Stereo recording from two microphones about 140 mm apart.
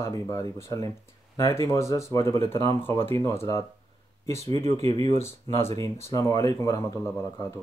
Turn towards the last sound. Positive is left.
turn(degrees=20)  # may be behind; listen again after turning